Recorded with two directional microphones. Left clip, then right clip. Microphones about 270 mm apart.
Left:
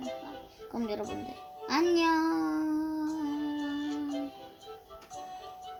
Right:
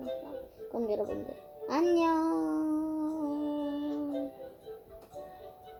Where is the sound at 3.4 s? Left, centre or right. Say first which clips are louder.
Even; left.